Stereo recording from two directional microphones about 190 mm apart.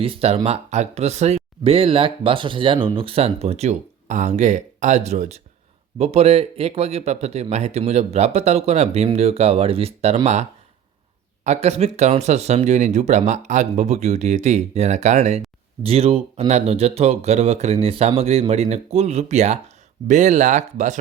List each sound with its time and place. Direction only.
0.0 s speech: 30° right (ahead or behind)
11.4 s speech: 35° right (ahead or behind)